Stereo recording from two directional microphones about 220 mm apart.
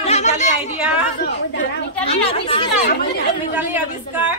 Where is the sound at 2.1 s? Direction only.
25° left (ahead or behind).